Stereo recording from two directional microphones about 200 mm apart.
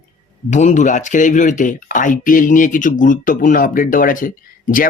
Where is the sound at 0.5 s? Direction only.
35° left (ahead or behind).